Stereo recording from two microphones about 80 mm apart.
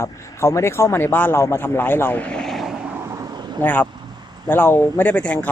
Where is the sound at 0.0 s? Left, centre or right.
Left; by 2.4 s centre.